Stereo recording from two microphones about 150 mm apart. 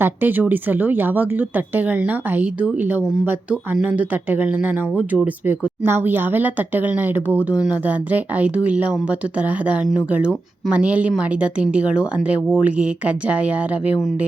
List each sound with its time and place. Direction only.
0.0 s speech: 15° right (ahead or behind)